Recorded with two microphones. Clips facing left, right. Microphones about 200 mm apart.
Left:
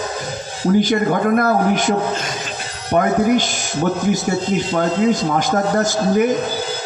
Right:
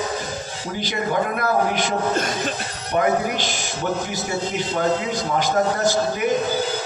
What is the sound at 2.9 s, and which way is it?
Speech, 50° left (ahead or behind).